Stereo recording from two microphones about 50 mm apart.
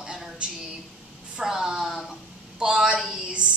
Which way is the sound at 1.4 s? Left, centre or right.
Centre.